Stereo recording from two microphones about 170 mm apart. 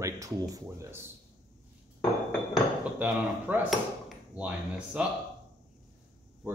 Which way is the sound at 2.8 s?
10° right (ahead or behind).